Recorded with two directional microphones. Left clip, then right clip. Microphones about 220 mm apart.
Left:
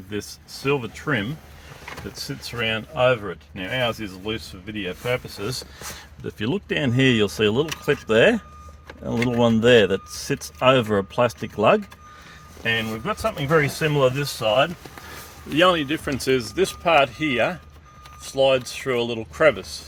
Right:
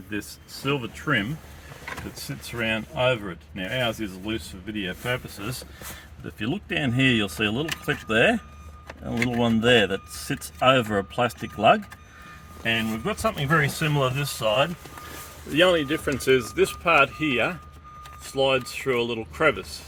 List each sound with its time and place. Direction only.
0.1 s speech: 45° left (ahead or behind)
2.2 s speech: 50° left (ahead or behind)
13.5 s speech: 30° left (ahead or behind)
15.5 s speech: 50° left (ahead or behind)